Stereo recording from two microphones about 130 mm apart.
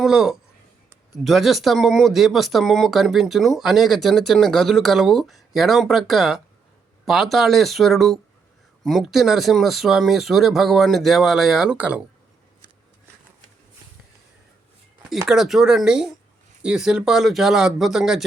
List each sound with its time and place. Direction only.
0.0 s speech: 5° right (ahead or behind)
15.3 s speech: centre (ahead or behind)